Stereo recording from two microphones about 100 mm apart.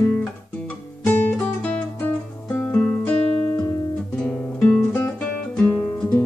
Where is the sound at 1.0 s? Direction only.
20° left (ahead or behind).